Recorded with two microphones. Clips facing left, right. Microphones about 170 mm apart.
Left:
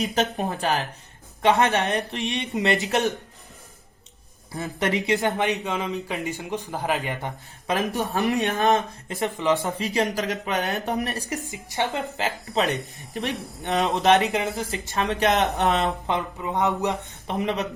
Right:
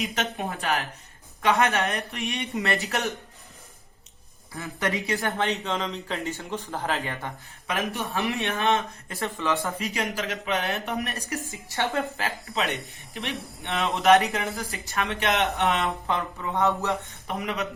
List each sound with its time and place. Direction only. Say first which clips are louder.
0.0 s speech: left 5 dB; 35° left (ahead or behind); by 3.0 s 20° left (ahead or behind)
4.5 s speech: left 4 dB; 20° left (ahead or behind)
7.7 s speech: left 4 dB; 35° left (ahead or behind)
9.0 s speech: left 6 dB; 20° left (ahead or behind)
9.8 s speech: left 5 dB; 35° left (ahead or behind)
11.5 s speech: even; 20° left (ahead or behind)
12.5 s speech: left 6 dB; 40° left (ahead or behind)
14.2 s speech: left 3 dB; 20° left (ahead or behind)
15.0 s speech: left 4 dB; 40° left (ahead or behind)
16.0 s speech: left 2 dB; 20° left (ahead or behind)